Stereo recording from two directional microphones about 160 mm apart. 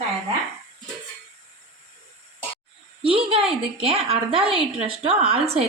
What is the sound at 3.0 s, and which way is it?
Speech, 35° right (ahead or behind).